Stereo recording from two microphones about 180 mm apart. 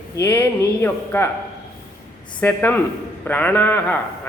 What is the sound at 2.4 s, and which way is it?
A man's voice, 10° left (ahead or behind).